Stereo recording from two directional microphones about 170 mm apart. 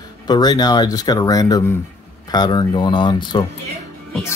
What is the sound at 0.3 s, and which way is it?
Speech, 25° left (ahead or behind).